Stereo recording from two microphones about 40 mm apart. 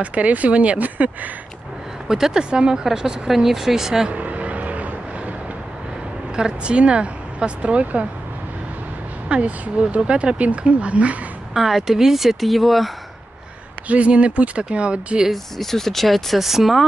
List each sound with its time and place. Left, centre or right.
0.0 s speech: right
2.0 s speech: centre
4.1 s vehicle: right
6.3 s speech: right
9.3 s speech: right
11.5 s speech: centre
13.8 s speech: right
15.3 s speech: centre